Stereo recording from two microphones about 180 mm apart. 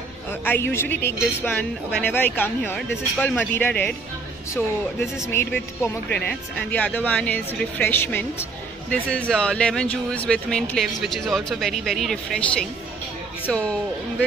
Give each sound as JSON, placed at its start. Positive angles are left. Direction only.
{"t": 0.3, "sound": "speech", "side_deg": 10}
{"t": 5.3, "sound": "speech", "side_deg": 15}